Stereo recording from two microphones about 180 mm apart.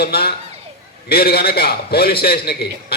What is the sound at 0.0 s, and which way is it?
A man's voice, 60° left (ahead or behind).